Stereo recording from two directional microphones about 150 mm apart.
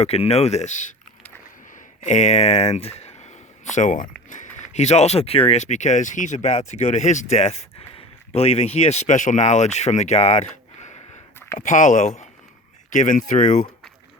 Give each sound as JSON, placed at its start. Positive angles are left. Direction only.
{"t": 0.0, "sound": "speech", "side_deg": 45}
{"t": 1.7, "sound": "a sound", "side_deg": 55}
{"t": 4.3, "sound": "speech", "side_deg": 55}